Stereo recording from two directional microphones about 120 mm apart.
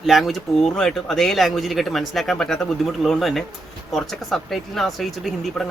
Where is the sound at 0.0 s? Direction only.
Centre (ahead or behind).